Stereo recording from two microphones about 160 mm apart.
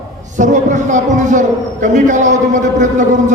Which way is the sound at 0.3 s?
50° right (ahead or behind).